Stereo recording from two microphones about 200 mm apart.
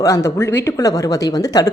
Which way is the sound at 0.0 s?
15° left (ahead or behind).